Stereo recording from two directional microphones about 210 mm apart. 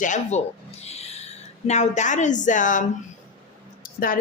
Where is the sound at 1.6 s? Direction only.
35° left (ahead or behind).